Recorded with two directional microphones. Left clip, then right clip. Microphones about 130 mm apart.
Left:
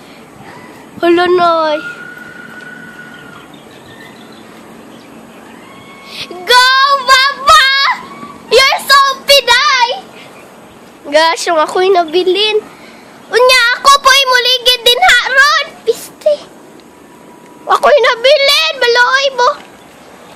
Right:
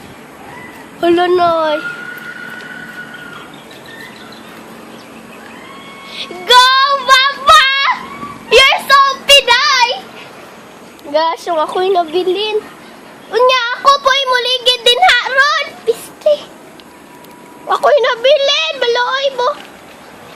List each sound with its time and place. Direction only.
1.0 s a woman's voice: 20° left (ahead or behind)
6.1 s child singing: 20° left (ahead or behind)
8.4 s a sound: 5° left (ahead or behind)
11.1 s a woman's voice: 50° left (ahead or behind)
12.2 s a woman's voice: 30° left (ahead or behind)
13.3 s a sound: 25° left (ahead or behind)
15.9 s child singing: 15° left (ahead or behind)
17.7 s a woman's voice: 25° left (ahead or behind)